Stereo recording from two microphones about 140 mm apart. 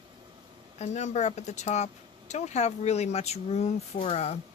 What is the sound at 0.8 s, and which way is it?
Speech, 55° left (ahead or behind).